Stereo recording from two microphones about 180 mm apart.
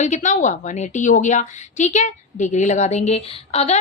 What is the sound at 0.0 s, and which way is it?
Speech, 40° left (ahead or behind).